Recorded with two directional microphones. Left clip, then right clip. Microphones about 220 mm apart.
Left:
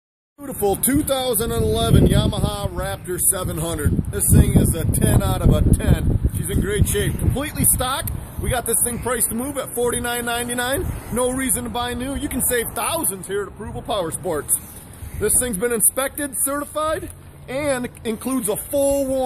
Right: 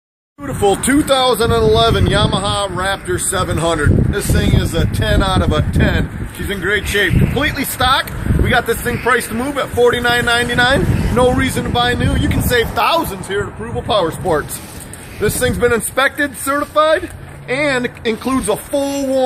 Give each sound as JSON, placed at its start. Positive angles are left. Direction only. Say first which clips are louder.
{"t": 0.6, "sound": "speech", "louder": "right 7 dB", "side_deg": 45}